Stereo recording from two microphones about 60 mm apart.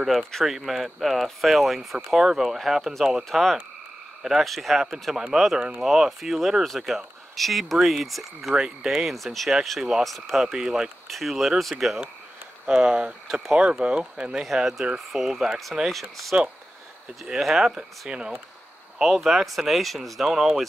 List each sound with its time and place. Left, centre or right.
0.0 s speech: centre
10.0 s speech: centre
10.4 s speech: centre
12.6 s speech: centre
14.4 s speech: centre
17.7 s speech: centre
18.9 s speech: centre